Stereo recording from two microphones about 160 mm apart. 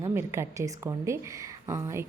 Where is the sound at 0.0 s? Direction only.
15° right (ahead or behind).